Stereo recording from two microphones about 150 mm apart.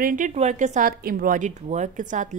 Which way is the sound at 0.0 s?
65° right (ahead or behind).